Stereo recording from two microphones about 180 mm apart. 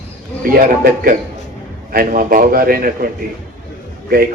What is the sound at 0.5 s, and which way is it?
A man's voice, 55° right (ahead or behind).